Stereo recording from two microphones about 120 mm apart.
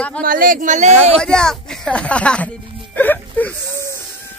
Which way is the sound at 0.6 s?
80° right.